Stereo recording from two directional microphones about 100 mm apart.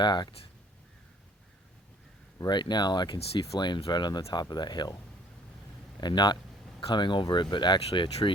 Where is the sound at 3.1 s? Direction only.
80° left.